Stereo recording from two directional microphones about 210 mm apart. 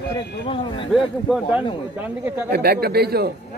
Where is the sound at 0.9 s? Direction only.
5° right (ahead or behind).